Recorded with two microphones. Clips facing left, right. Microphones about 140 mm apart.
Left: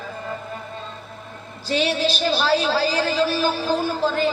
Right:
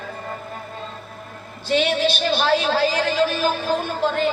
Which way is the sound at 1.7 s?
35° left (ahead or behind).